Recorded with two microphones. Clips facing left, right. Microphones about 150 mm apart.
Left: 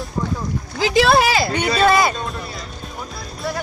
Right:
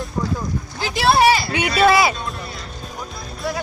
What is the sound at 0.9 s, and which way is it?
Speech, 90° left.